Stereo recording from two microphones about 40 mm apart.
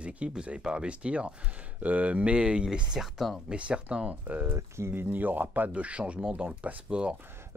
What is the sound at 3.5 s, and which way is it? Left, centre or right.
Speech, right.